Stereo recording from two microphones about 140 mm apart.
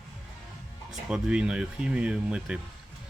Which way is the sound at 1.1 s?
5° right (ahead or behind).